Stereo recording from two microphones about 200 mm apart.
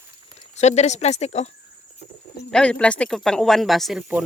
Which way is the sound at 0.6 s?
35° left (ahead or behind).